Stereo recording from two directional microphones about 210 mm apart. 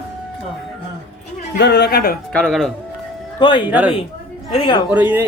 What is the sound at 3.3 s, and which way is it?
Speech, 20° left (ahead or behind).